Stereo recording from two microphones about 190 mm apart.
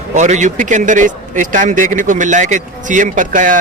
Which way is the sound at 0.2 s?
40° right (ahead or behind).